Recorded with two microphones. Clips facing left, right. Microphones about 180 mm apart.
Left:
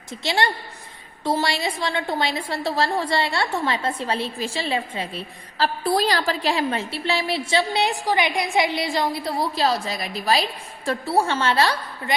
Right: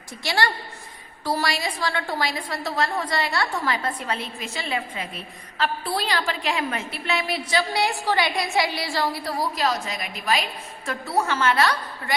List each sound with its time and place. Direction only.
0.2 s a woman's voice: 25° left (ahead or behind)